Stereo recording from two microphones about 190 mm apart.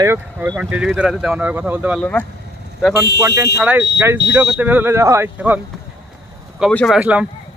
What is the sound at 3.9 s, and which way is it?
Speech, 10° right (ahead or behind).